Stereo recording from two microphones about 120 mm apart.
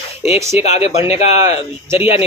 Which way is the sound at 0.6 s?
65° left (ahead or behind).